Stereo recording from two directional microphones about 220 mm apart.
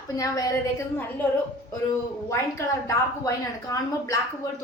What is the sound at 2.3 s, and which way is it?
A woman's voice, 15° left (ahead or behind).